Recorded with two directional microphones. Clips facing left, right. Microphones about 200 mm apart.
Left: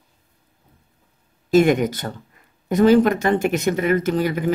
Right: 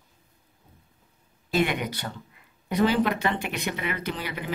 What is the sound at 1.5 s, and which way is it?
Speech, 45° left (ahead or behind).